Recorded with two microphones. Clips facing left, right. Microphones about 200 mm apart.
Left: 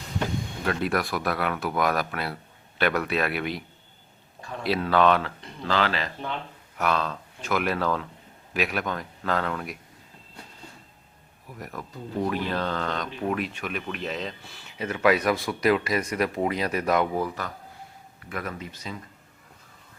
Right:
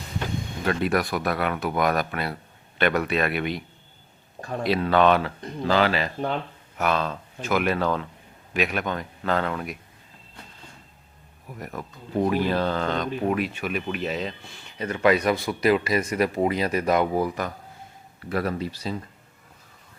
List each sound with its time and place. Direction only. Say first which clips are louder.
0.6 s speech: right 3 dB; centre (ahead or behind)
4.4 s a sound: right 6 dB; 45° right (ahead or behind)
4.6 s speech: right 2 dB; centre (ahead or behind)
6.1 s speech: right 6 dB; 40° right (ahead or behind)
6.7 s speech: right 2 dB; centre (ahead or behind)
11.6 s speech: even; centre (ahead or behind)
17.2 s speech: right 4 dB; 15° right (ahead or behind)
18.3 s speech: right 8 dB; 35° right (ahead or behind)